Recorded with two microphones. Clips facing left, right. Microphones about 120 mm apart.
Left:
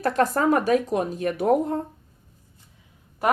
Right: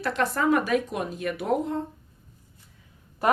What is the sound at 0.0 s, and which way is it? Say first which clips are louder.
Speech: left 4 dB; 40° left (ahead or behind).